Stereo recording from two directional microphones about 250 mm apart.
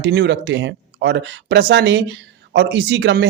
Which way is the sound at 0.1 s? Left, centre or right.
Right.